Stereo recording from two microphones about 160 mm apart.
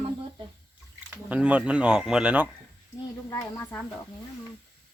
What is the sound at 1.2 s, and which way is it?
Speech, 10° right (ahead or behind).